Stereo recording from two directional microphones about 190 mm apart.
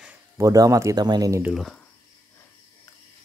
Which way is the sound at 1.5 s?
Centre (ahead or behind).